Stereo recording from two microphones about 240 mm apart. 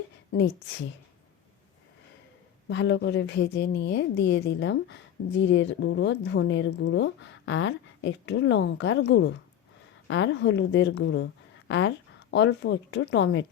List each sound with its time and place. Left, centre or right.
0.3 s a woman's voice: left
2.6 s a woman's voice: left